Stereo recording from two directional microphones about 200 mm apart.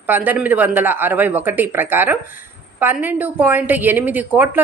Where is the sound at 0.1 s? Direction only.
10° right (ahead or behind).